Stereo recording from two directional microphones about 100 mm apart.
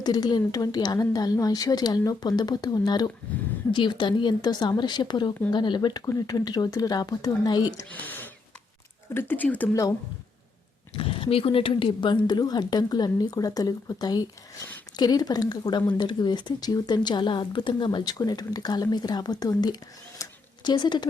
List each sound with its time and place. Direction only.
0.0 s speech: 40° left (ahead or behind)
7.9 s speech: 15° left (ahead or behind)
10.9 s speech: 60° left (ahead or behind); by 19.7 s 40° left (ahead or behind)
20.2 s a sound: 35° left (ahead or behind)
20.7 s speech: 50° left (ahead or behind)